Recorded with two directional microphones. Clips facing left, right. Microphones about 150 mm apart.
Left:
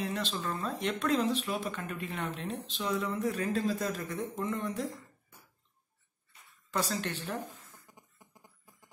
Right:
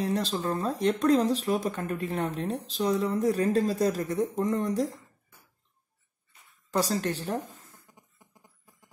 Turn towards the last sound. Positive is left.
turn(degrees=-40)  # may be behind; listen again after turning